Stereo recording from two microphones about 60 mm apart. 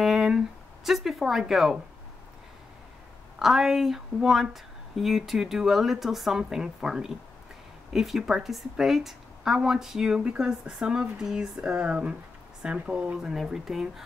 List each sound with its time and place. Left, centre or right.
0.0 s a sound: centre
0.8 s speech: centre
3.3 s a woman's voice: centre